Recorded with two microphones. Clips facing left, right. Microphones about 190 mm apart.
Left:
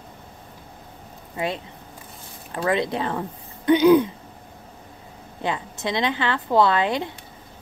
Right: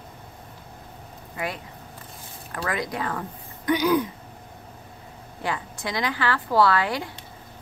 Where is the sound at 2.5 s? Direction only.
25° left (ahead or behind).